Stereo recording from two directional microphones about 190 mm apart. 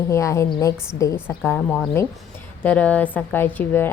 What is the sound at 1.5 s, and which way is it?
A woman's voice, centre (ahead or behind).